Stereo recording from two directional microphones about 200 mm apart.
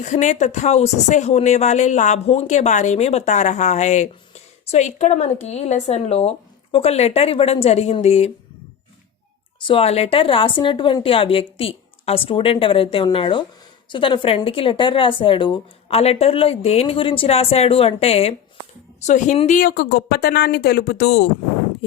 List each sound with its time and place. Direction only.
0.0 s speech: 35° left (ahead or behind)
9.6 s a woman's voice: 30° left (ahead or behind); by 21.2 s 55° left (ahead or behind)